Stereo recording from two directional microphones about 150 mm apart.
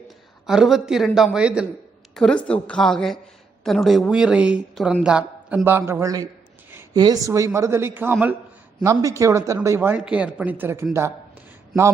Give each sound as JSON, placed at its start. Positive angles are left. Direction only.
{"t": 0.4, "sound": "a man's voice", "side_deg": -5}
{"t": 2.1, "sound": "a man's voice", "side_deg": 5}